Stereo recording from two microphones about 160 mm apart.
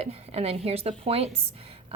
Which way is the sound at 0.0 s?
40° right (ahead or behind).